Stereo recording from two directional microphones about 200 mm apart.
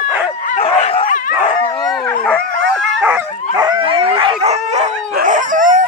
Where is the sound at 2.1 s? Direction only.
5° left (ahead or behind).